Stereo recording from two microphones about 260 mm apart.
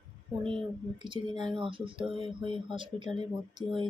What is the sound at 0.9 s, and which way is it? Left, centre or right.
Speech, centre.